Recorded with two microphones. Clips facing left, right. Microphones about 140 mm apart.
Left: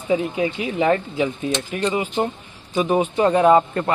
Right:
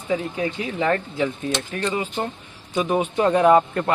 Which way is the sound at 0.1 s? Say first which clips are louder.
Left 4 dB; 15° left (ahead or behind).